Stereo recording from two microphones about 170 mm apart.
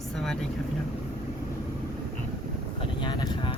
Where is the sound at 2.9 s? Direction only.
25° left (ahead or behind).